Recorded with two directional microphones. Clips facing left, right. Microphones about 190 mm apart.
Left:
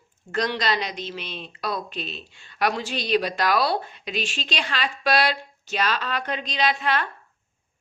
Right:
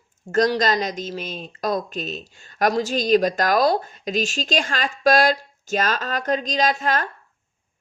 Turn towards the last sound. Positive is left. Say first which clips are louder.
# right 3 dB
turn(degrees=-45)  # may be behind; listen again after turning